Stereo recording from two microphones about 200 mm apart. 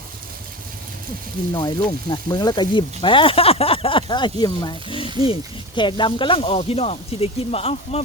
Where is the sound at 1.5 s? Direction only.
20° left (ahead or behind).